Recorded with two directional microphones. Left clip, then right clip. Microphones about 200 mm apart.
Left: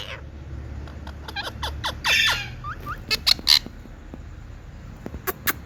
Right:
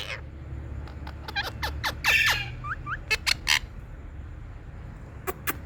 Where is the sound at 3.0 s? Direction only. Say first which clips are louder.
Left 5 dB; 10° right (ahead or behind).